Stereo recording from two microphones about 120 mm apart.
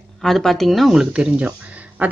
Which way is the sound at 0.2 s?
Centre (ahead or behind).